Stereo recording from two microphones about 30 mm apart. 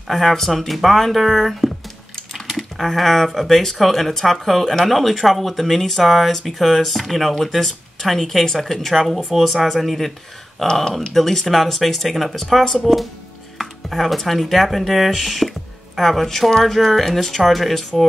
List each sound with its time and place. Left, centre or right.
0.1 s speech: centre
2.4 s a sound: centre
3.3 s speech: centre
10.7 s speech: left
11.1 s speech: centre